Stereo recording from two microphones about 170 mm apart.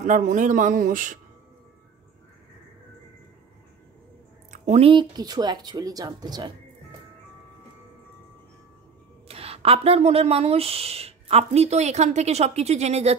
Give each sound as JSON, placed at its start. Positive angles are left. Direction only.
{"t": 0.0, "sound": "speech", "side_deg": -45}
{"t": 4.5, "sound": "speech", "side_deg": -40}
{"t": 9.3, "sound": "speech", "side_deg": -35}